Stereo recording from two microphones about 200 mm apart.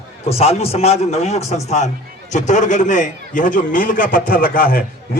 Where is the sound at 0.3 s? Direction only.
30° left (ahead or behind).